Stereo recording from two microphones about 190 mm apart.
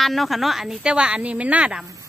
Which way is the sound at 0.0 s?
Centre (ahead or behind).